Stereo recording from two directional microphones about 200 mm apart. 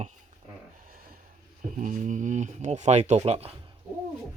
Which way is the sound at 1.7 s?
40° right (ahead or behind).